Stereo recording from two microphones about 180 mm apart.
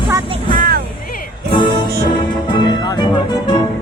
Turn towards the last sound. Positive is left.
turn(degrees=25)  # may be behind; listen again after turning